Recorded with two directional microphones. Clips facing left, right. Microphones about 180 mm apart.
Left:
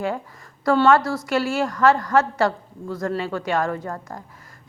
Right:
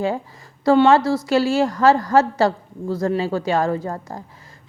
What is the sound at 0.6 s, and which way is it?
A woman's voice, 30° right (ahead or behind).